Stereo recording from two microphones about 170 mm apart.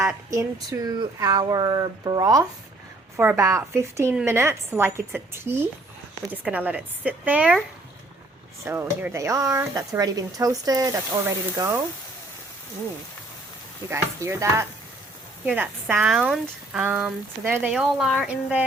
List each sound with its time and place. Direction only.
0.3 s speech: 20° right (ahead or behind)
8.6 s speech: 15° right (ahead or behind)
13.9 s speech: 15° right (ahead or behind)